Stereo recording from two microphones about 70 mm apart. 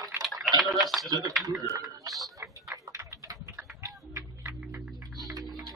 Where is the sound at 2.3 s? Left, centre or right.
Right.